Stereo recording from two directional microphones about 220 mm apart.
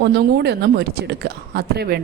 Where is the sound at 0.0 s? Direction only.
45° right (ahead or behind).